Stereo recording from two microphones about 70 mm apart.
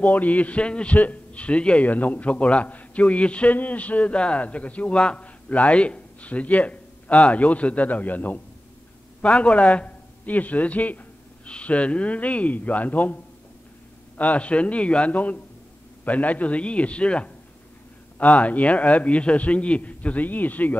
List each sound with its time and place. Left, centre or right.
0.0 s a man's voice: left